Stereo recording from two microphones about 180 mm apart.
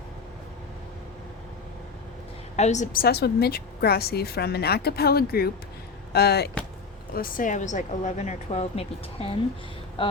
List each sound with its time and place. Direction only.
2.6 s a woman's voice: 40° left (ahead or behind); by 6.5 s 60° left (ahead or behind)
7.1 s speech: 50° left (ahead or behind); by 10.1 s 30° left (ahead or behind)